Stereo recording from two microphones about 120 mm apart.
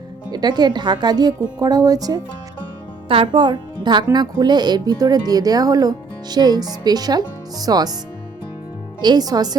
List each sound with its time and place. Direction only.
0.3 s speech: 35° right (ahead or behind)
3.1 s speech: 45° right (ahead or behind)
9.0 s speech: 35° right (ahead or behind)